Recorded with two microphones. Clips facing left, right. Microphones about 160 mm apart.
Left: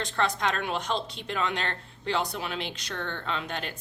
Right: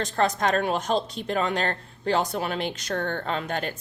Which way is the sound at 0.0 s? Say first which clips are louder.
Right 4 dB; 40° right (ahead or behind).